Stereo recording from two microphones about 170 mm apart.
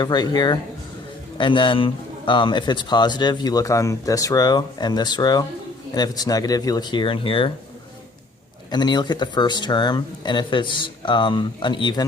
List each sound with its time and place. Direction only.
0.0 s a man's voice: 25° left (ahead or behind)
8.7 s a man's voice: 25° left (ahead or behind)